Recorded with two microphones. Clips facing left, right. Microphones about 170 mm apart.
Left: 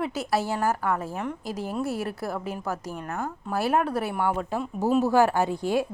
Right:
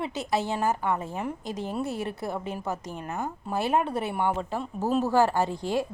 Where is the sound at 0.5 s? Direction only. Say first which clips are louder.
Left 1 dB; 20° right (ahead or behind).